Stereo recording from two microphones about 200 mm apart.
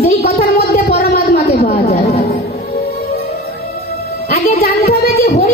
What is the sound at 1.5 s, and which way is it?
Chatter, 50° left (ahead or behind).